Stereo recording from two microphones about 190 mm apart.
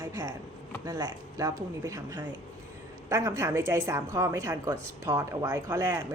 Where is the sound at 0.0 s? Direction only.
15° right (ahead or behind).